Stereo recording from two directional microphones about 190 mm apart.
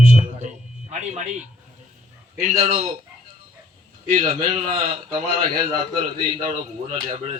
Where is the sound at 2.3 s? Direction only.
35° right (ahead or behind).